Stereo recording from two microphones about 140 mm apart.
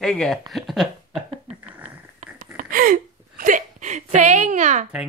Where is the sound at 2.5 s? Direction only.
75° right (ahead or behind); by 4.9 s 60° right (ahead or behind).